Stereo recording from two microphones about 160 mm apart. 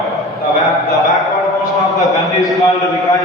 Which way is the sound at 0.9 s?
Centre (ahead or behind).